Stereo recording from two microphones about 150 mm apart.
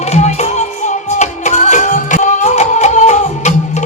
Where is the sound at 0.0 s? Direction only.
45° left (ahead or behind).